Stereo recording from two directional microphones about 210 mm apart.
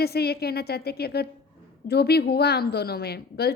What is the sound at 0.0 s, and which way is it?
A woman's voice, 50° left (ahead or behind).